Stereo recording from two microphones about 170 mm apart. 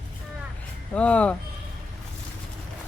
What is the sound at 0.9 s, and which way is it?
Speech, 5° left (ahead or behind).